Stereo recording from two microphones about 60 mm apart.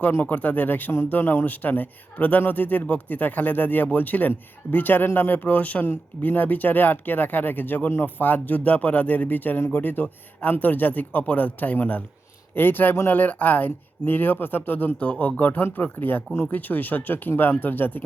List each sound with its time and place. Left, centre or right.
0.1 s speech: left
14.9 s speech: left